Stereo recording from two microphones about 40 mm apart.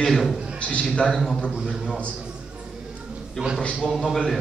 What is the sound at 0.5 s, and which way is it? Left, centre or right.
Speech, left.